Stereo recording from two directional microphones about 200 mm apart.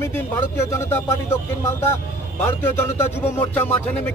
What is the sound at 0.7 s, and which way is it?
Speech, 15° left (ahead or behind).